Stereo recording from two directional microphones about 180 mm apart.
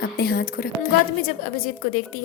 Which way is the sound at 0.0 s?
60° left (ahead or behind).